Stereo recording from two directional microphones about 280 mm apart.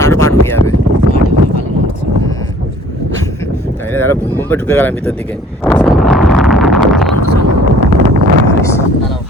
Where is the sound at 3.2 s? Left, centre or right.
Centre.